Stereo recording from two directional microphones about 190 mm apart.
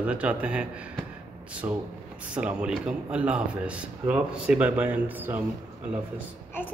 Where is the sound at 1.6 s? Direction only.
20° right (ahead or behind).